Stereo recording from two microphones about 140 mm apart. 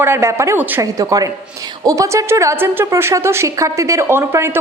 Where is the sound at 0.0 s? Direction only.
20° right (ahead or behind).